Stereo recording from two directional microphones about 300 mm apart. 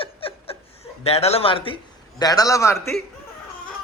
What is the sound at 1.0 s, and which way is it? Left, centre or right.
A man's voice, left.